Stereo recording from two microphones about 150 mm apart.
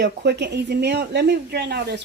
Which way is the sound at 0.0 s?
90° right.